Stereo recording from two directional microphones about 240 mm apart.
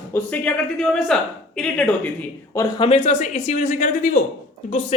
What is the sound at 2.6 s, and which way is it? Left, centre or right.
A woman's voice, left.